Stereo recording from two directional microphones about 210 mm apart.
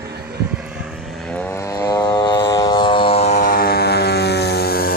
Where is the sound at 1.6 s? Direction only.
15° left (ahead or behind).